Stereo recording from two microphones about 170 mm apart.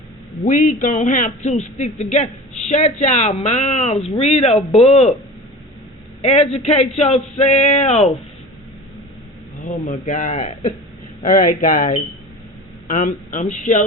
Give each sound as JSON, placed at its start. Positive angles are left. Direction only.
{"t": 0.4, "sound": "speech", "side_deg": 50}
{"t": 6.2, "sound": "speech", "side_deg": 40}
{"t": 9.6, "sound": "speech", "side_deg": 50}